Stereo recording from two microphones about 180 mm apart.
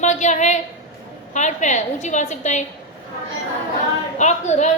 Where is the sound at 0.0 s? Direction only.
40° left (ahead or behind).